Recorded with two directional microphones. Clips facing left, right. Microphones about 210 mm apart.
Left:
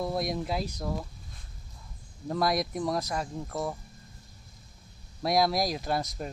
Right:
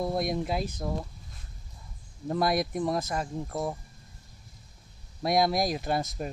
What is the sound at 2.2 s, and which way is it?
Speech, 5° right (ahead or behind).